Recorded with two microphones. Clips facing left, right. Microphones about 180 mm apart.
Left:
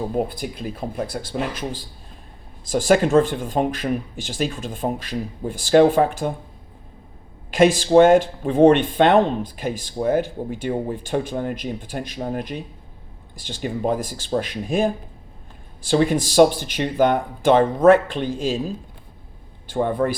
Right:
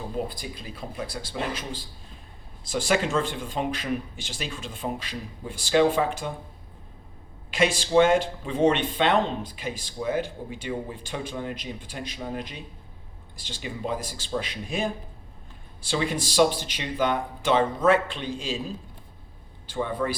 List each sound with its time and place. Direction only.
0.1 s speech: 55° left (ahead or behind)
2.8 s speech: 50° left (ahead or behind)
7.5 s speech: 50° left (ahead or behind)
19.7 s speech: 55° left (ahead or behind)